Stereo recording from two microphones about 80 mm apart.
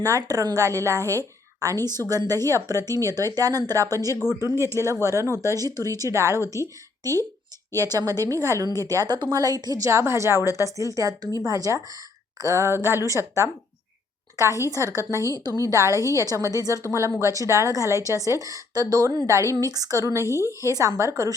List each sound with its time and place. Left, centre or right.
0.0 s a woman's voice: right
0.9 s a woman's voice: left
1.6 s a woman's voice: right
6.0 s a woman's voice: right
14.5 s a woman's voice: left
15.5 s a woman's voice: right